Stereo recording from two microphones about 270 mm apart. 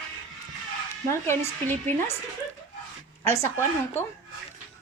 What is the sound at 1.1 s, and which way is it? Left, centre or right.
Speech, centre.